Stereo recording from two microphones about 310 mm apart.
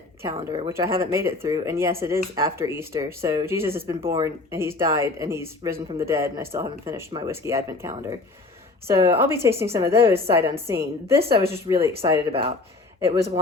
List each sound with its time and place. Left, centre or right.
0.3 s speech: centre